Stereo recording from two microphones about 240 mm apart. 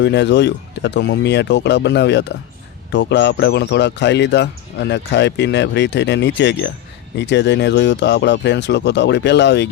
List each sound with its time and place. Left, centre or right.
0.0 s speech: left